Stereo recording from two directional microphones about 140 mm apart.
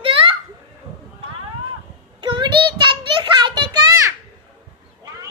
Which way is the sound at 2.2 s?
35° right (ahead or behind).